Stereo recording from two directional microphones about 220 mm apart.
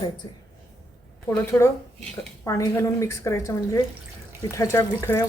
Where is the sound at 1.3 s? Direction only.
10° left (ahead or behind).